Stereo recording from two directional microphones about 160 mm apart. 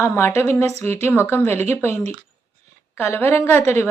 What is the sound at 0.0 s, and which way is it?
Speech, 15° left (ahead or behind).